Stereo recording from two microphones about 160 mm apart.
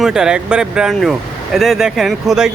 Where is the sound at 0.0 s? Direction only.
5° right (ahead or behind).